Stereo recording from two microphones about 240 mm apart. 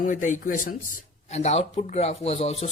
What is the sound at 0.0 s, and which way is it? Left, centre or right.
Speech, left.